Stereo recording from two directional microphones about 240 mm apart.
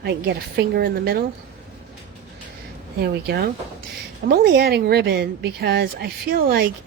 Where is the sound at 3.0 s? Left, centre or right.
Right.